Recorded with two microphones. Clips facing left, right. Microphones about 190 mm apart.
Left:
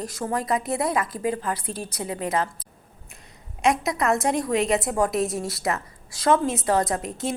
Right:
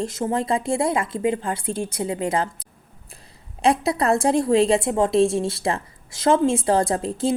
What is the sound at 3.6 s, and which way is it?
A woman's voice, 30° right (ahead or behind).